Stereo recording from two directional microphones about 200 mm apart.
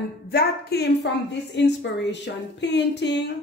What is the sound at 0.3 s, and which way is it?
A woman's voice, 50° left (ahead or behind).